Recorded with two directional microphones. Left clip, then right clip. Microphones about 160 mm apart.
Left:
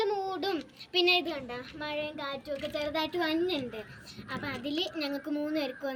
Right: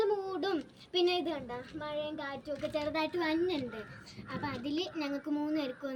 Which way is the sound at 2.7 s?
15° right (ahead or behind).